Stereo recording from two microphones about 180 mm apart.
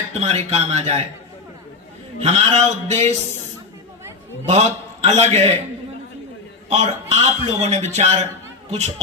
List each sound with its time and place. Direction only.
0.1 s a man's voice: 35° right (ahead or behind)
2.2 s a man's voice: 35° right (ahead or behind)
4.4 s a man's voice: 35° right (ahead or behind)
6.7 s a man's voice: 40° right (ahead or behind)